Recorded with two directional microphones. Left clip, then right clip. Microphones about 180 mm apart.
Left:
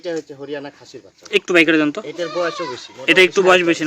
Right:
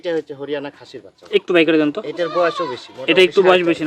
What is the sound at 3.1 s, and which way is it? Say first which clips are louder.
Speech: even; 5° left (ahead or behind).